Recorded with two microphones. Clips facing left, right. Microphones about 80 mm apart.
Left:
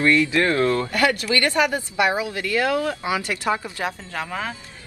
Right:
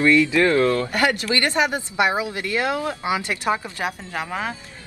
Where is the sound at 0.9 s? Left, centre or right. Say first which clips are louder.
Even; right.